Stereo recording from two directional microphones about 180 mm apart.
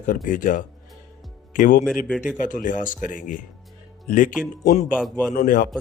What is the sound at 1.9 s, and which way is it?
Speech, 5° left (ahead or behind).